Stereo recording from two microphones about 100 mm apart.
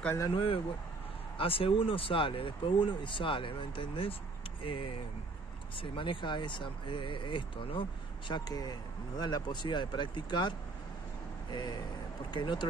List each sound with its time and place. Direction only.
0.3 s speech: 70° left (ahead or behind)
8.3 s speech: 40° left (ahead or behind)
11.5 s speech: 45° left (ahead or behind)